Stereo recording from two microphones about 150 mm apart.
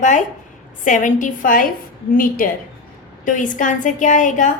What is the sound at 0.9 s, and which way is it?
A woman's voice, 60° left (ahead or behind).